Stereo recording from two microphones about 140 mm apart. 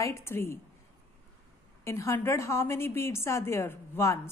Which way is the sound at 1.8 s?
20° left (ahead or behind).